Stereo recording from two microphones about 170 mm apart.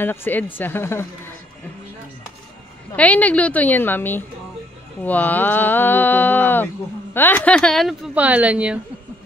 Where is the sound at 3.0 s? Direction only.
10° left (ahead or behind); by 8.8 s 5° right (ahead or behind).